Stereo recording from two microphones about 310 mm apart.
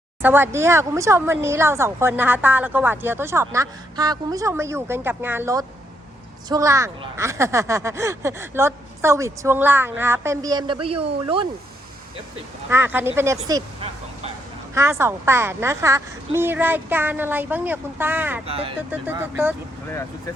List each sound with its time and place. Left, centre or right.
0.2 s speech: centre
12.6 s speech: centre
14.8 s speech: centre
18.4 s speech: centre
18.9 s speech: centre